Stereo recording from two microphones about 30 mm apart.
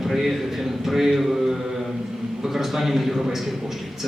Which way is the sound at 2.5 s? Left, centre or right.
Centre.